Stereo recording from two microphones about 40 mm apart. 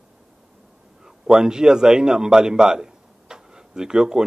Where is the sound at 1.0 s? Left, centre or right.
Centre.